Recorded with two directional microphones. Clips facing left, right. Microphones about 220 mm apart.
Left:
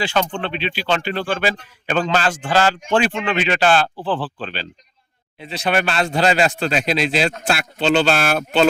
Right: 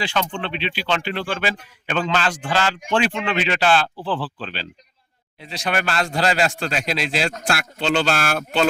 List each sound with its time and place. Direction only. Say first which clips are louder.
0.1 s speech: left 3 dB; 40° left (ahead or behind)
5.4 s speech: left 4 dB; centre (ahead or behind)
5.6 s a man's voice: left 3 dB; 25° left (ahead or behind)